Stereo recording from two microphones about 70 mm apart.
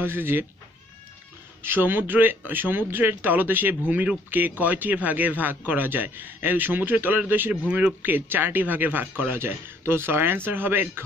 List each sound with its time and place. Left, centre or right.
0.0 s speech: right
1.6 s speech: right